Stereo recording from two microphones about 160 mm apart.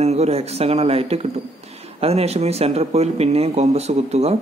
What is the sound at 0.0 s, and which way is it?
Speech, 40° right (ahead or behind).